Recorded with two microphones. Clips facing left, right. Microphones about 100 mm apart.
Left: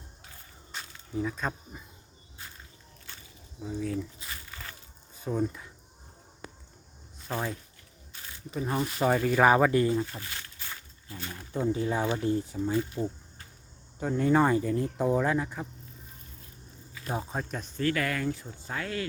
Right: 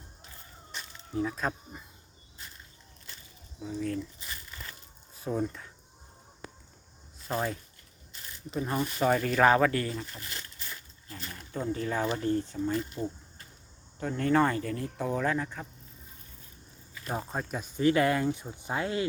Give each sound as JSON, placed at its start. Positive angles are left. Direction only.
{"t": 1.1, "sound": "speech", "side_deg": 0}
{"t": 3.6, "sound": "speech", "side_deg": 5}
{"t": 5.1, "sound": "speech", "side_deg": 0}
{"t": 7.2, "sound": "speech", "side_deg": -5}
{"t": 9.0, "sound": "speech", "side_deg": 10}
{"t": 11.3, "sound": "speech", "side_deg": 15}
{"t": 17.1, "sound": "speech", "side_deg": 0}
{"t": 17.7, "sound": "speech", "side_deg": -20}